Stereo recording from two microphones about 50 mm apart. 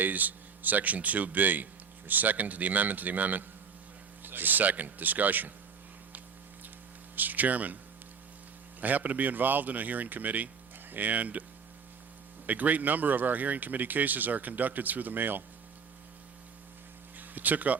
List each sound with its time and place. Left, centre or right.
0.0 s speech: right
7.2 s speech: right
8.8 s speech: right
12.5 s speech: right
17.2 s a sound: right